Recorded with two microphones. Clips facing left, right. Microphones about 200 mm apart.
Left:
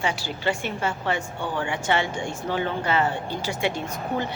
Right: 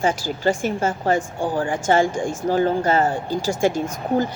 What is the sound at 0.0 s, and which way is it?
Speech, 45° right (ahead or behind).